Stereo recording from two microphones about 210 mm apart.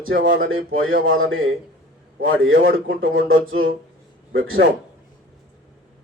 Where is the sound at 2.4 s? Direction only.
55° right (ahead or behind).